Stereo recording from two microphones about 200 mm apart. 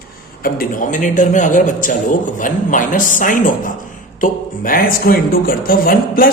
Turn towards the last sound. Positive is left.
turn(degrees=45)  # may be behind; listen again after turning